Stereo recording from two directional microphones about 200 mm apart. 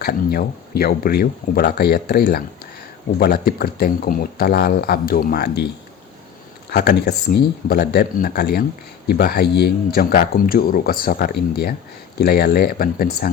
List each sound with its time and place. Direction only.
0.0 s speech: 50° left (ahead or behind)
6.7 s speech: 55° left (ahead or behind)